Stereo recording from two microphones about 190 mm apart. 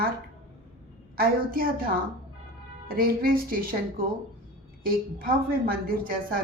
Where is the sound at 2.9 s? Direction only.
50° right (ahead or behind).